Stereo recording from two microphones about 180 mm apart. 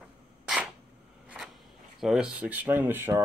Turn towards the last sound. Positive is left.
turn(degrees=-10)  # may be behind; listen again after turning